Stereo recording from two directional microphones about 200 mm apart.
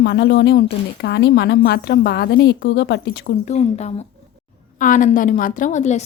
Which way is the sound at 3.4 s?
35° left (ahead or behind).